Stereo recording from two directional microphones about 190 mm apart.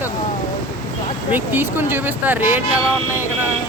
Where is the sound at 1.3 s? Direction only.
10° right (ahead or behind).